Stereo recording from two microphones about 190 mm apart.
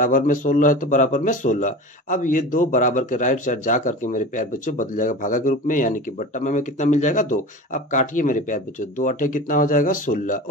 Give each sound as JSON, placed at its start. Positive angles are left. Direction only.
{"t": 0.0, "sound": "a man's voice", "side_deg": 45}